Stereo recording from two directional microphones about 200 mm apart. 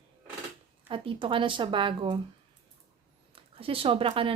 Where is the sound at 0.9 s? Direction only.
25° right (ahead or behind).